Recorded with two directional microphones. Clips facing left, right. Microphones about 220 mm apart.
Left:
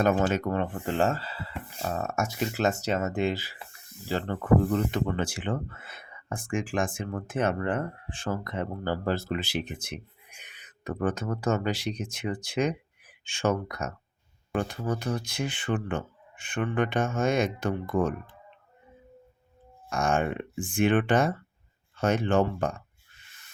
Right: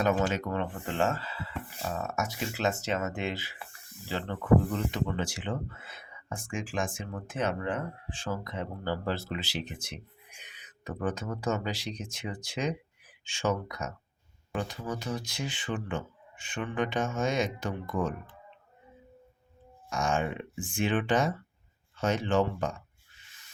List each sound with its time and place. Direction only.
0.0 s speech: 50° left (ahead or behind)
19.9 s speech: 55° left (ahead or behind)